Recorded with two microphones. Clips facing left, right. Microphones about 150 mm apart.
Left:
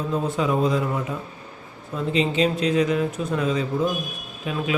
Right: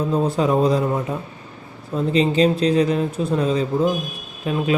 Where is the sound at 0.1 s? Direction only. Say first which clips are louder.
Right 3 dB; 35° right (ahead or behind).